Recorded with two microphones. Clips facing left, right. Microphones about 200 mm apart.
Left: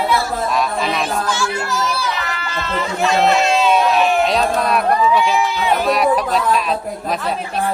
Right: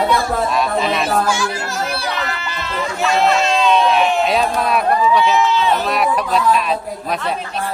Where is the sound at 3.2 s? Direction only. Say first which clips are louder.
Left 1 dB; 5° left (ahead or behind).